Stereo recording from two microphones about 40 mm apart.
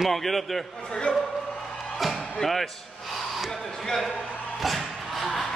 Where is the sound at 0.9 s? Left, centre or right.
Left.